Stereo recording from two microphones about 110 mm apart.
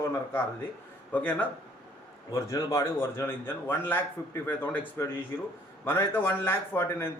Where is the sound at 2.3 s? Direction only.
30° left (ahead or behind).